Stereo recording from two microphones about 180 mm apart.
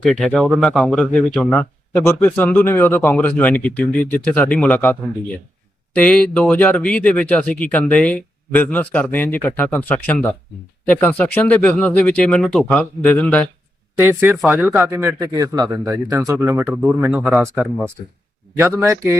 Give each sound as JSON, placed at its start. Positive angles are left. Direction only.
{"t": 0.0, "sound": "a man's voice", "side_deg": 5}
{"t": 14.0, "sound": "a man's voice", "side_deg": -10}
{"t": 18.6, "sound": "a man's voice", "side_deg": -15}